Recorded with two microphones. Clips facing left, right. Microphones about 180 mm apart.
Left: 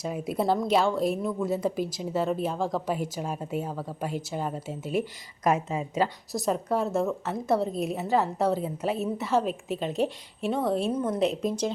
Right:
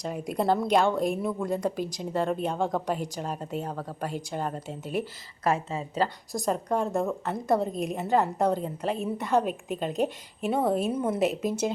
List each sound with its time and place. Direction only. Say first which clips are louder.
0.0 s a woman's voice: even; 5° left (ahead or behind)